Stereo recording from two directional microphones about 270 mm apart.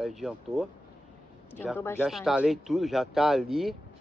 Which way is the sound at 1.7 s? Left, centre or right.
Centre.